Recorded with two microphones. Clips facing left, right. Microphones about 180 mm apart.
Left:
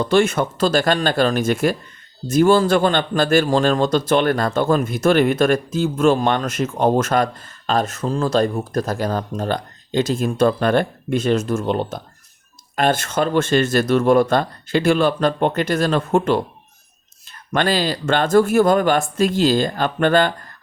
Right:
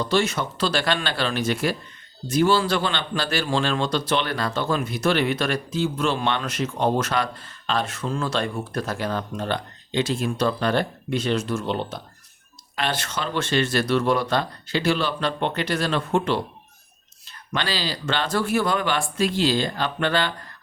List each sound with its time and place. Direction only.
0.0 s a man's voice: 55° left (ahead or behind)